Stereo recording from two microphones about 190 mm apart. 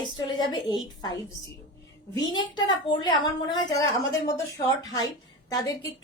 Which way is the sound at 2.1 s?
20° left (ahead or behind).